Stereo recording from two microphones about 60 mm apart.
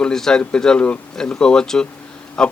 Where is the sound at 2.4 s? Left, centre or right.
Centre.